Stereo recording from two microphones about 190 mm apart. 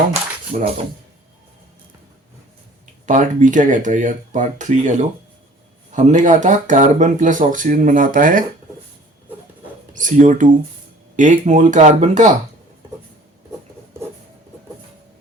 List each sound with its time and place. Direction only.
3.1 s speech: 40° right (ahead or behind)
9.9 s speech: 40° right (ahead or behind)